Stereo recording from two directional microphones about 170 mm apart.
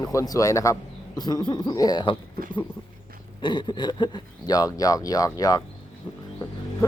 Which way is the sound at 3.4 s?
25° left (ahead or behind).